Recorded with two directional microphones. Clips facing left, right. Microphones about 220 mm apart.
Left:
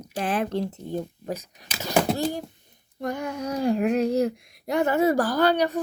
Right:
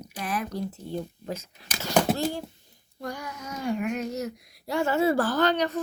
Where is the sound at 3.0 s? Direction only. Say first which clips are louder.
Left 7 dB; 25° left (ahead or behind).